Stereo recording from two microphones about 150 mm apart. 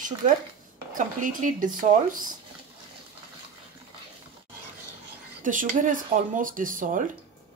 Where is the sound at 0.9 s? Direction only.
65° right (ahead or behind).